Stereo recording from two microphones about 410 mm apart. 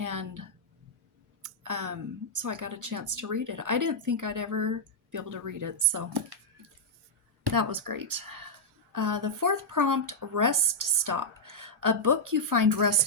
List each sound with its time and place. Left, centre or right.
0.0 s a sound: right
1.4 s speech: right
7.4 s speech: right